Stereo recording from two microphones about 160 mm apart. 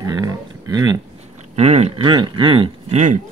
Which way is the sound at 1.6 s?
45° right (ahead or behind).